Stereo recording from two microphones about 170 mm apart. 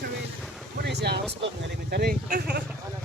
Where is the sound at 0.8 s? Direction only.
80° right.